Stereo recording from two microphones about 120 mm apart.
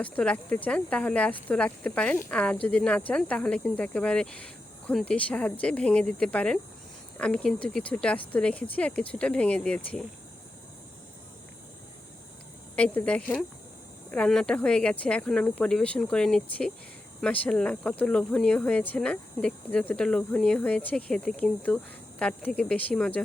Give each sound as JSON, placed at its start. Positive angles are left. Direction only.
{"t": 0.0, "sound": "speech", "side_deg": 10}
{"t": 12.7, "sound": "speech", "side_deg": 10}